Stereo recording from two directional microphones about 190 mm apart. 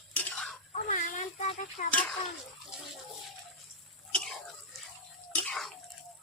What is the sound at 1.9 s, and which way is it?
Speech, 5° left (ahead or behind).